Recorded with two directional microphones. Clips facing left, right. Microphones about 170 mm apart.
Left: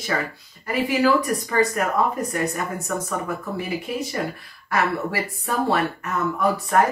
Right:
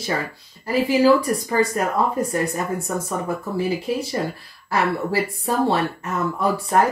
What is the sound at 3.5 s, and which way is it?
Speech, 30° right (ahead or behind).